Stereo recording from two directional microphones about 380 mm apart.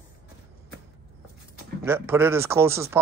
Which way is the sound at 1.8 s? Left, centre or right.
Centre.